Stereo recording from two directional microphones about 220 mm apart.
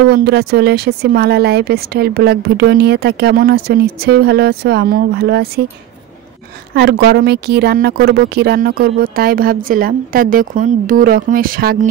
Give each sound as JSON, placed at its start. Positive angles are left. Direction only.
{"t": 0.0, "sound": "speech", "side_deg": -45}
{"t": 6.7, "sound": "speech", "side_deg": -45}